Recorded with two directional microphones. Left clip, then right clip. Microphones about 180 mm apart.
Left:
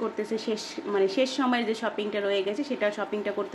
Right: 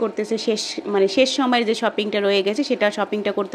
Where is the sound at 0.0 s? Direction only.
40° right (ahead or behind).